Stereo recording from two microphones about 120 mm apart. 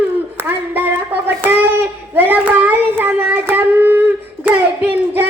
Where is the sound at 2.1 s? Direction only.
15° right (ahead or behind).